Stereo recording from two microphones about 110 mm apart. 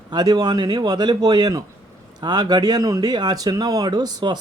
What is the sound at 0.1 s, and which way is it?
Speech, 35° right (ahead or behind).